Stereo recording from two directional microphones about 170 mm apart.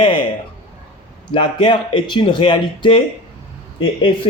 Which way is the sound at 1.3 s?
30° left (ahead or behind).